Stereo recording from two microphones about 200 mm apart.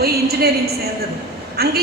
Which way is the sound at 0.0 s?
50° right (ahead or behind).